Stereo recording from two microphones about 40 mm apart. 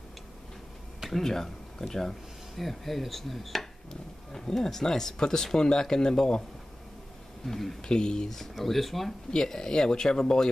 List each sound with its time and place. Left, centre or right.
1.1 s speech: centre
7.4 s speech: centre
7.9 s speech: centre
9.3 s speech: centre